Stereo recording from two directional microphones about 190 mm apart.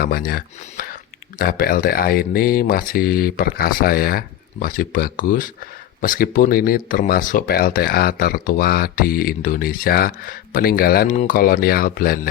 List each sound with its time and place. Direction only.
0.0 s speech: 50° left (ahead or behind)